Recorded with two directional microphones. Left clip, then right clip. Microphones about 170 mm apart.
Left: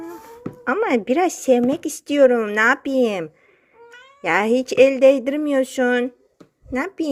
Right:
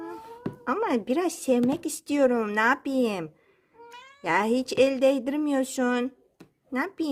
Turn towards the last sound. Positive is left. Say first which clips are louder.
# left 5 dB
turn(degrees=10)  # may be behind; listen again after turning